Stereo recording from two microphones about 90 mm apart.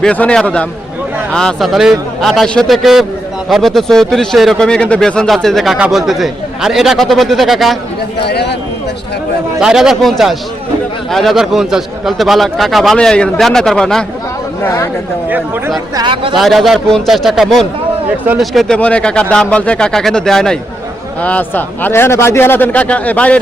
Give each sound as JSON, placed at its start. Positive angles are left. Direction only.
{"t": 0.0, "sound": "a man's voice", "side_deg": 15}
{"t": 9.6, "sound": "a man's voice", "side_deg": -5}
{"t": 14.6, "sound": "speech", "side_deg": 30}
{"t": 16.3, "sound": "a man's voice", "side_deg": 0}
{"t": 18.8, "sound": "speech", "side_deg": 15}
{"t": 21.2, "sound": "a man's voice", "side_deg": 15}